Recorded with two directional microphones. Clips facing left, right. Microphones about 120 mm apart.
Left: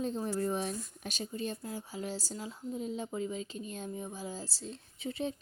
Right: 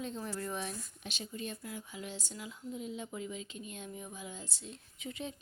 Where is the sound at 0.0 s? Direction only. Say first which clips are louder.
Left 6 dB; 35° left (ahead or behind).